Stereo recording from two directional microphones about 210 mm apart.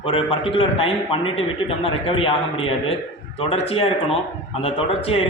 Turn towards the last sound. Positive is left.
turn(degrees=25)  # may be behind; listen again after turning